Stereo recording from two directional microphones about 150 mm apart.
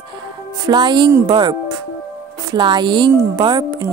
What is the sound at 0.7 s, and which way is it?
Speech, 30° right (ahead or behind).